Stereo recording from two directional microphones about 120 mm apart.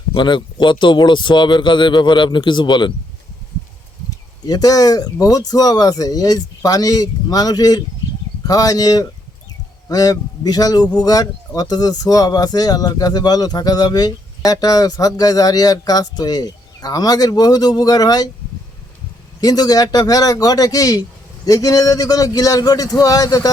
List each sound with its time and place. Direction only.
0.1 s speech: 40° left (ahead or behind)
4.4 s speech: 35° left (ahead or behind)
19.4 s speech: 35° left (ahead or behind)